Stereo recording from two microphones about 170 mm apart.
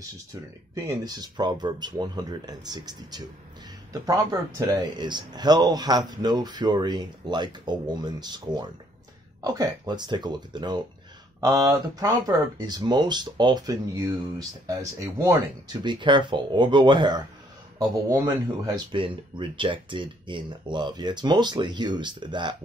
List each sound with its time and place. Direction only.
0.7 s speech: 20° right (ahead or behind)